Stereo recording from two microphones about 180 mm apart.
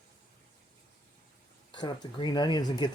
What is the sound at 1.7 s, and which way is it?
Speech, 25° left (ahead or behind).